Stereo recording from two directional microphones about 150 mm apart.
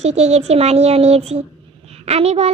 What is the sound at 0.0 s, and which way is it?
A child's voice, 45° right (ahead or behind).